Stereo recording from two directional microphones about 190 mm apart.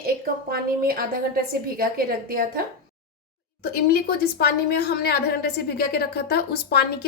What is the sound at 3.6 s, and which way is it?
A woman's voice, 55° left (ahead or behind).